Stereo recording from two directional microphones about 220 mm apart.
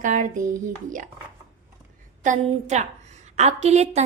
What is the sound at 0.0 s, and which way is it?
A woman's voice, 35° right (ahead or behind).